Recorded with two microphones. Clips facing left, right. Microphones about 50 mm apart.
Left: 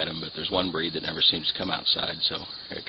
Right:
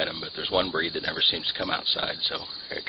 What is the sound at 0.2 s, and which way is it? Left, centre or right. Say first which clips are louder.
Speech: right 1 dB; centre.